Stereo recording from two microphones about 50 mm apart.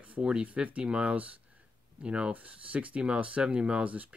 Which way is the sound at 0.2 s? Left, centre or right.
Centre.